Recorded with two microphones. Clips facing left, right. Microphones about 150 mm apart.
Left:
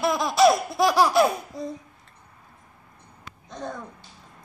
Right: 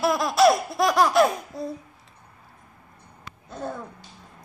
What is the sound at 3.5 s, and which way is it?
Babbling, 5° right (ahead or behind).